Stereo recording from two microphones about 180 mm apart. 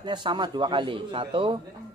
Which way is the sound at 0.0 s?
25° right (ahead or behind).